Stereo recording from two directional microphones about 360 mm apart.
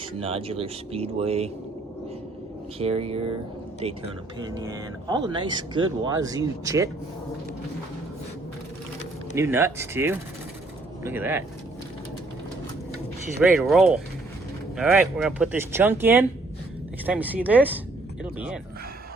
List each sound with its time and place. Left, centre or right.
0.2 s speech: centre
2.7 s speech: centre
4.6 s speech: centre
9.3 s speech: centre
13.6 s speech: centre